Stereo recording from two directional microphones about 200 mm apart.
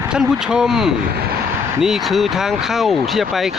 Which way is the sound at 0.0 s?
5° right (ahead or behind).